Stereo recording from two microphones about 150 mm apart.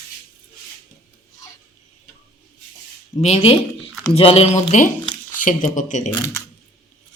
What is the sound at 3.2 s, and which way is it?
Speech, 45° left (ahead or behind).